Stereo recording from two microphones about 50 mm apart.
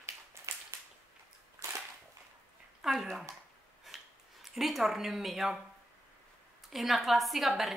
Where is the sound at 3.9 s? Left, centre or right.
Centre.